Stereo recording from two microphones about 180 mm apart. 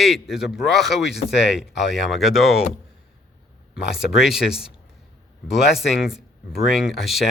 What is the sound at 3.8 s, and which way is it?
Speech, 65° left (ahead or behind).